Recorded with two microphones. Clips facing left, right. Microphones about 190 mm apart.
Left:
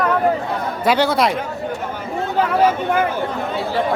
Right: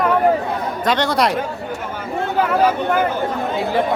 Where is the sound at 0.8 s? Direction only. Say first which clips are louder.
Left 2 dB; 5° left (ahead or behind).